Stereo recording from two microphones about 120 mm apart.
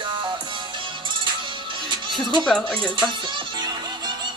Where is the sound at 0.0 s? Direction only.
40° right (ahead or behind).